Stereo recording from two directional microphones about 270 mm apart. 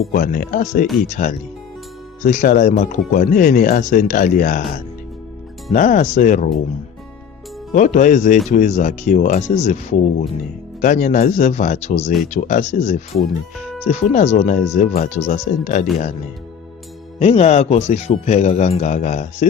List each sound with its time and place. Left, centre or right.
0.1 s speech: left
5.7 s speech: left
7.7 s speech: left
17.2 s speech: left